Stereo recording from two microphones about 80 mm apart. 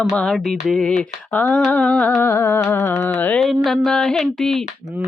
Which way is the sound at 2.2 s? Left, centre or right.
Left.